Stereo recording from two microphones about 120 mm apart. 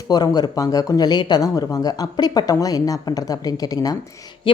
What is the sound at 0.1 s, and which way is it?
A woman's voice, 35° left (ahead or behind).